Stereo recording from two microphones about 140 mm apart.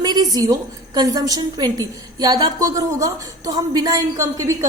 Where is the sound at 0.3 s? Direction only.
30° right (ahead or behind).